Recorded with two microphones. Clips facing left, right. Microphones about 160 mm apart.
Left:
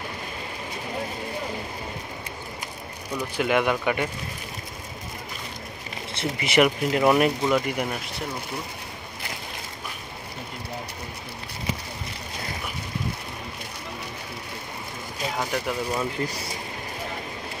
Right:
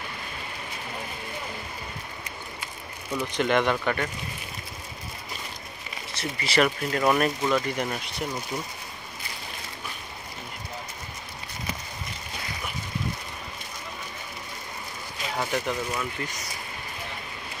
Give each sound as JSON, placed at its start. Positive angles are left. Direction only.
{"t": 3.3, "sound": "speech", "side_deg": 10}
{"t": 6.1, "sound": "speech", "side_deg": 20}
{"t": 15.3, "sound": "a sound", "side_deg": 0}
{"t": 15.9, "sound": "speech", "side_deg": 35}